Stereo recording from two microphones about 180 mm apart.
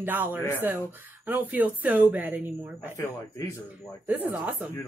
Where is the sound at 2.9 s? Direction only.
15° left (ahead or behind).